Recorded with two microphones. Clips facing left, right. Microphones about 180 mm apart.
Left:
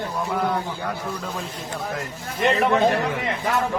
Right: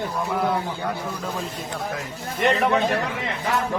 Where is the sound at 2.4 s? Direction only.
Centre (ahead or behind).